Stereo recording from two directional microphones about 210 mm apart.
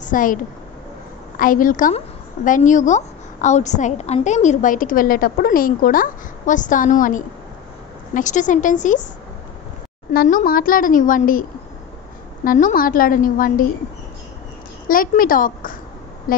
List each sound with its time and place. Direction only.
0.0 s a woman's voice: 40° left (ahead or behind)
10.1 s a woman's voice: 40° left (ahead or behind)
12.4 s a woman's voice: 40° left (ahead or behind)
14.9 s a woman's voice: 40° left (ahead or behind)